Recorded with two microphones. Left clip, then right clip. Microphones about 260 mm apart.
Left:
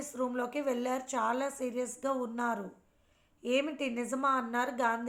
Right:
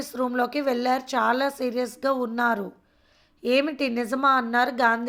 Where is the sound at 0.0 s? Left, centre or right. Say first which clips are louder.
Right 9 dB; right.